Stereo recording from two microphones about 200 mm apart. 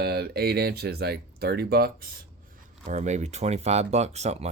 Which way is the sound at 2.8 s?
35° right (ahead or behind).